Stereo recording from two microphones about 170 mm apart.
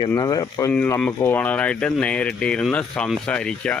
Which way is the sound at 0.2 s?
20° left (ahead or behind).